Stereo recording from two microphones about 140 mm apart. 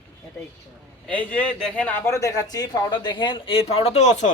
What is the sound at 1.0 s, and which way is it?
A man's voice, 10° left (ahead or behind).